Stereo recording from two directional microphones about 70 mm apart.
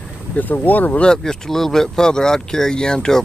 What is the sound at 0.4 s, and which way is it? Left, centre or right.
Speech, left.